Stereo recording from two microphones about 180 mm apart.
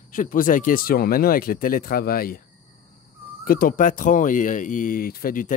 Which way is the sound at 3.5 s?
50° left (ahead or behind).